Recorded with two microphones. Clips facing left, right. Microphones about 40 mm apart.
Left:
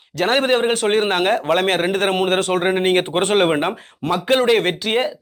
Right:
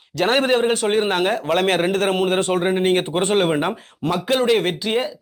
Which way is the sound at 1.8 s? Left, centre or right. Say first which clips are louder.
Left 1 dB; left.